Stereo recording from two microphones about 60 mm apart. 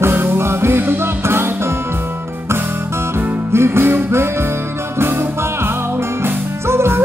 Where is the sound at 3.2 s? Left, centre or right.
Right.